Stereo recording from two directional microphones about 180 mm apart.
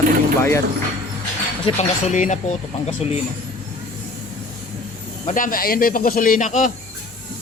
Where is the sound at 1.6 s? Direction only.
40° left (ahead or behind).